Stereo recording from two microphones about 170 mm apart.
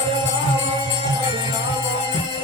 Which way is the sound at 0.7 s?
30° right (ahead or behind).